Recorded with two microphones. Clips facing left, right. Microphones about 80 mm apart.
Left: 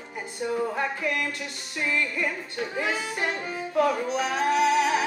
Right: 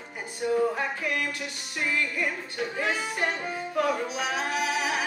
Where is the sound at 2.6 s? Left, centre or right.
Centre.